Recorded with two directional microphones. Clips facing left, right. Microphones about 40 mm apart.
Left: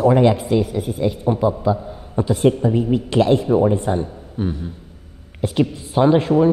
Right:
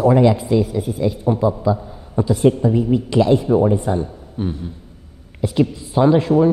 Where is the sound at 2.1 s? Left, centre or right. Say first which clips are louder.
Right 1 dB; left.